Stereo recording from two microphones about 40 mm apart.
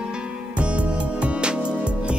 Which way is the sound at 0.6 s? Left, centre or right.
Right.